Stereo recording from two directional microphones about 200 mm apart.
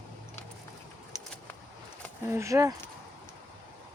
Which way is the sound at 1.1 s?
15° left (ahead or behind).